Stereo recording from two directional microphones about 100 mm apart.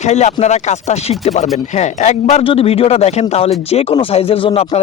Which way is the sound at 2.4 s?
70° left (ahead or behind).